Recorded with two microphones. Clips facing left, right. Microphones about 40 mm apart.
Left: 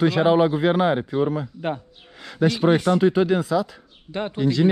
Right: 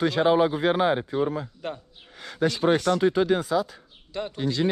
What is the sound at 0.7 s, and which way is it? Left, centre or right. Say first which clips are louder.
Speech: left 2 dB; left.